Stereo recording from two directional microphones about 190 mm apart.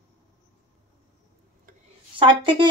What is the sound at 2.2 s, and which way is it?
Speech, 25° right (ahead or behind).